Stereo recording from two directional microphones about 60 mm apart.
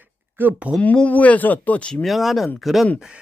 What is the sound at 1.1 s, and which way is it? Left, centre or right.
Speech, left.